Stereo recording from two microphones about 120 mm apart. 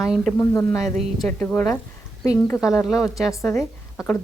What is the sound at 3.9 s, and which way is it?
Speech, 20° left (ahead or behind).